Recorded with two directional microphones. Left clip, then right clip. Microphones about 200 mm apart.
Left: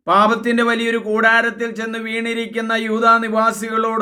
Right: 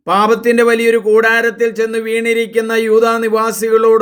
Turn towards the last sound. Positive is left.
turn(degrees=-30)  # may be behind; listen again after turning